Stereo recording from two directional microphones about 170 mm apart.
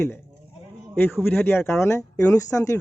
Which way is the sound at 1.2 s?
10° left (ahead or behind).